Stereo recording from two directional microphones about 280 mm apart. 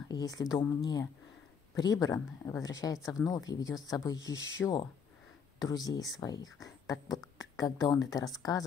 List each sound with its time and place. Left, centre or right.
0.1 s speech: centre
1.8 s speech: centre